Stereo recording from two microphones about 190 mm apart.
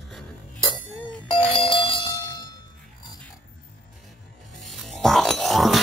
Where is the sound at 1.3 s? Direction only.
25° left (ahead or behind).